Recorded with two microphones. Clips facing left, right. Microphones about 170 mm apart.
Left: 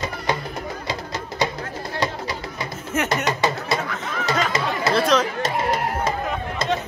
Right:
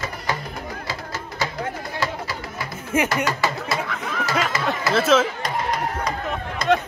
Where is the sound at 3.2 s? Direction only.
20° left (ahead or behind).